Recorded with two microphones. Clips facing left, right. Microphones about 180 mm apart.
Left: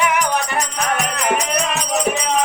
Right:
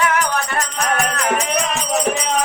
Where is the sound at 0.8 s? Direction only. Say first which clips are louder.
Right 2 dB; centre (ahead or behind).